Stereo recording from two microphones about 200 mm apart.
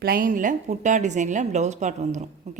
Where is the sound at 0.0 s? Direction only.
45° right (ahead or behind).